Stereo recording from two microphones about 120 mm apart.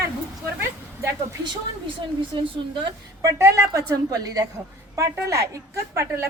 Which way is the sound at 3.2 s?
25° right (ahead or behind).